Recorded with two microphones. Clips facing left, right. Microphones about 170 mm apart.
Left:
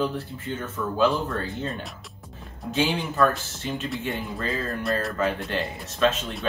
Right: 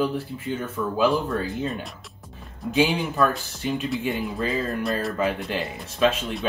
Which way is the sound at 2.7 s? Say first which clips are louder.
Right 3 dB; 10° right (ahead or behind).